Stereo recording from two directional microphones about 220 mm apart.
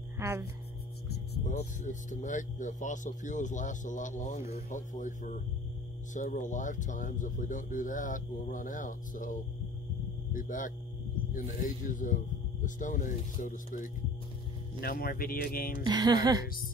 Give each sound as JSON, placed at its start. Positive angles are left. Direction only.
{"t": 0.2, "sound": "music", "side_deg": -15}
{"t": 1.0, "sound": "speech", "side_deg": 35}
{"t": 15.8, "sound": "speech", "side_deg": -20}